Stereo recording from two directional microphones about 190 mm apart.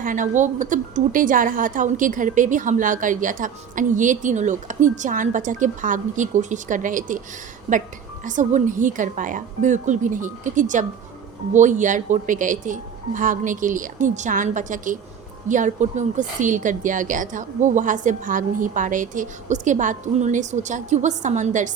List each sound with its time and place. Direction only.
0.0 s a woman's voice: 45° right (ahead or behind)
8.2 s a woman's voice: 40° right (ahead or behind)